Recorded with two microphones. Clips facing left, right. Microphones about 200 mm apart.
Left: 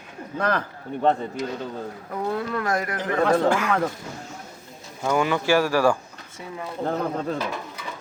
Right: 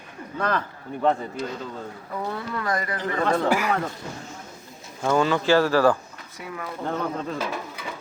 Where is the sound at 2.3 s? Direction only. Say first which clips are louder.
Left 4 dB; 60° left (ahead or behind).